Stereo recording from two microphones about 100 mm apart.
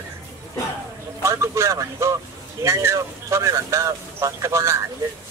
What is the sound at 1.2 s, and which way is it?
Speech, 30° right (ahead or behind).